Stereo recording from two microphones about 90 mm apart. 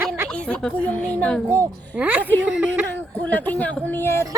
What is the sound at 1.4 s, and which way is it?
A child's voice, 30° right (ahead or behind).